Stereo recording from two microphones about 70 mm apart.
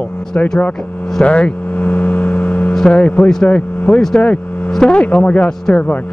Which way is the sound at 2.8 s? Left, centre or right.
Centre.